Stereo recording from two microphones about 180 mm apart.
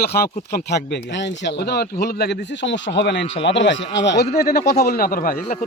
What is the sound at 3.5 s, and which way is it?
Speech, 90° left.